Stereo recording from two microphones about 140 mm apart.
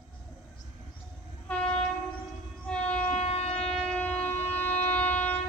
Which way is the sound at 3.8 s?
5° left (ahead or behind).